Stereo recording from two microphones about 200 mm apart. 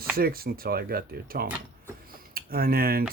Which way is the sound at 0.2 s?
50° right (ahead or behind).